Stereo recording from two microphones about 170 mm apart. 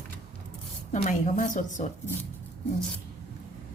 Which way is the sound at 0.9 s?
50° left (ahead or behind).